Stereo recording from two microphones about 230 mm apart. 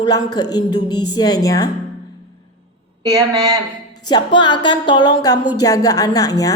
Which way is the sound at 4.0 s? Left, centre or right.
Centre.